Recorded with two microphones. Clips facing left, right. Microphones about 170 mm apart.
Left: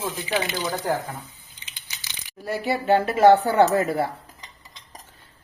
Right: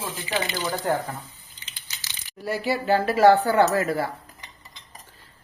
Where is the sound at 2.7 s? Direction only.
25° left (ahead or behind).